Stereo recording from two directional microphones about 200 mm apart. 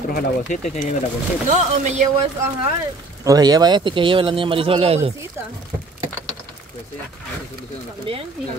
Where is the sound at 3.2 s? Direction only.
20° right (ahead or behind).